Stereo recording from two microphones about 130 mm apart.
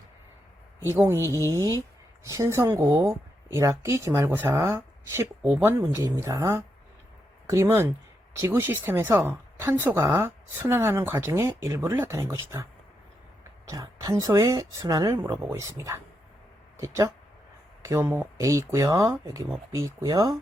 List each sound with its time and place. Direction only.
1.0 s a woman's voice: 20° right (ahead or behind)
1.3 s speech: 20° left (ahead or behind)
2.2 s a woman's voice: 25° right (ahead or behind)
5.4 s speech: 10° right (ahead or behind)
5.8 s a woman's voice: 25° right (ahead or behind)
13.7 s a woman's voice: 25° right (ahead or behind)